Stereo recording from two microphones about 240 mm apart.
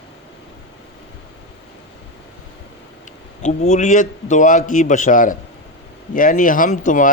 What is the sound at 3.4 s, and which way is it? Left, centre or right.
Speech, left.